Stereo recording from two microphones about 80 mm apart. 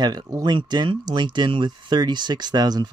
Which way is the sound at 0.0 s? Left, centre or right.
Right.